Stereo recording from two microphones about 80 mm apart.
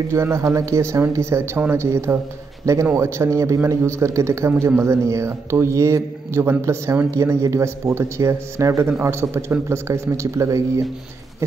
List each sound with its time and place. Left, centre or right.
0.1 s a man's voice: right